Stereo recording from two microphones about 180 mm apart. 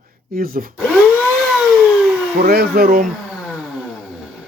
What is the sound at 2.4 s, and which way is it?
Speech, 60° right (ahead or behind).